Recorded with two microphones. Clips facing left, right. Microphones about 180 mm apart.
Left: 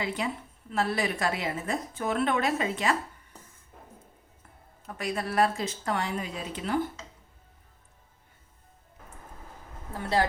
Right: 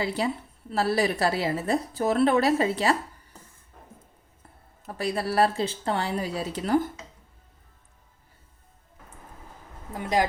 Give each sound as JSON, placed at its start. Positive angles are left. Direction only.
{"t": 0.0, "sound": "a woman's voice", "side_deg": -35}
{"t": 4.9, "sound": "a woman's voice", "side_deg": -30}
{"t": 9.9, "sound": "speech", "side_deg": -15}